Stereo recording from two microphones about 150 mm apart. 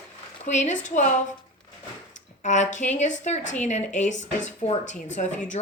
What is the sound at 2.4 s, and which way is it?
A woman's voice, 55° left (ahead or behind).